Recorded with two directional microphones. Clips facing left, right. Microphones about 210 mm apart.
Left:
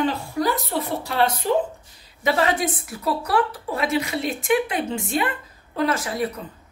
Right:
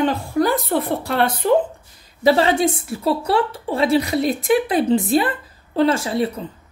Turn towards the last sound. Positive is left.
turn(degrees=-30)  # may be behind; listen again after turning